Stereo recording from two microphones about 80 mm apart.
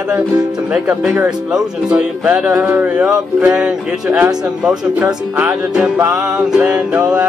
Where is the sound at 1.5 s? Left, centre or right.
Centre.